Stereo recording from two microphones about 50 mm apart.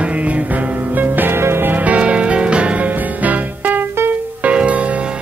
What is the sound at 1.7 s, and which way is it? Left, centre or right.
Music, right.